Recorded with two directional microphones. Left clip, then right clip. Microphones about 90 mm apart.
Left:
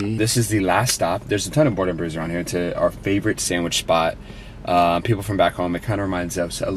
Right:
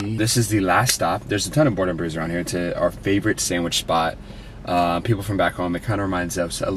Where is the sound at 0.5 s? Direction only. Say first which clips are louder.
Right 1 dB; 20° left (ahead or behind).